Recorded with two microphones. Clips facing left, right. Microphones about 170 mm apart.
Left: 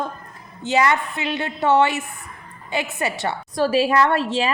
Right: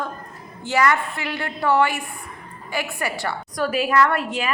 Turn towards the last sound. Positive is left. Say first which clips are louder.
# left 2 dB
turn(degrees=30)  # may be behind; listen again after turning